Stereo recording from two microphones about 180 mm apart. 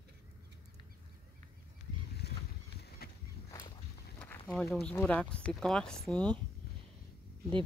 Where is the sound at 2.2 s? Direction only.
65° left (ahead or behind).